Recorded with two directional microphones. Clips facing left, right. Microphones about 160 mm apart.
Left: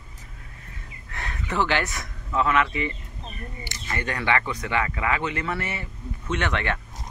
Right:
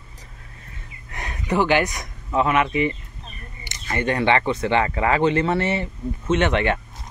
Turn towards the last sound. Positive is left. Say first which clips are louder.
# right 7 dB
turn(degrees=-20)  # may be behind; listen again after turning